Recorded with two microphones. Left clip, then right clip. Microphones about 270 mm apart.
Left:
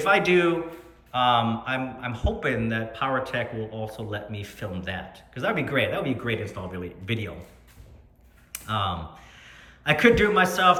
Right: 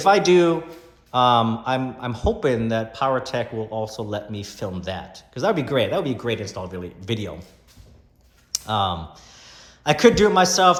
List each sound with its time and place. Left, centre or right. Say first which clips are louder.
0.0 s speech: right 5 dB; centre
8.5 s speech: right 5 dB; centre